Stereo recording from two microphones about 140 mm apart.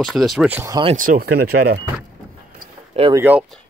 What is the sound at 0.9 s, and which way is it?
Speech, 70° right (ahead or behind).